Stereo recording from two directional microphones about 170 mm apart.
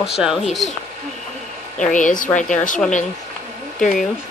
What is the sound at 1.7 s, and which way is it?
Speech, 50° left (ahead or behind).